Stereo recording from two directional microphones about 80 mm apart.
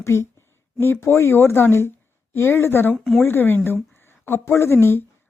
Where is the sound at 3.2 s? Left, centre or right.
Left.